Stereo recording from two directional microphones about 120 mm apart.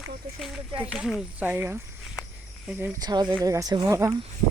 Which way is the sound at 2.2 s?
5° right (ahead or behind).